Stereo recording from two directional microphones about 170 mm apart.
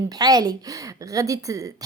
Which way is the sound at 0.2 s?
25° right (ahead or behind).